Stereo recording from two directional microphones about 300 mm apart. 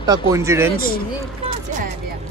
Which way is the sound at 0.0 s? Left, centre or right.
Centre.